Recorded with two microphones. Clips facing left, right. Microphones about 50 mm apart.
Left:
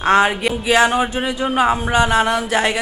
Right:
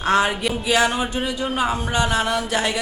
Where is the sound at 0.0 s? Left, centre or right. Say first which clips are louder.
Left 4 dB; left.